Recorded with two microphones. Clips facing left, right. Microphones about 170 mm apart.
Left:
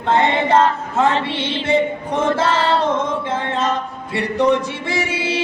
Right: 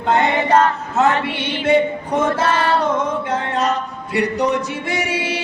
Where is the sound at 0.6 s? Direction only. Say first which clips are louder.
Even; 25° left (ahead or behind).